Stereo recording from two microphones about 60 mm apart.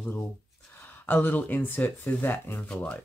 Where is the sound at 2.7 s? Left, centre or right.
Left.